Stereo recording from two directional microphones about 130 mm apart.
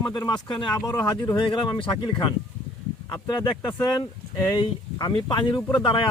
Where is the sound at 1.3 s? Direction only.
40° left (ahead or behind).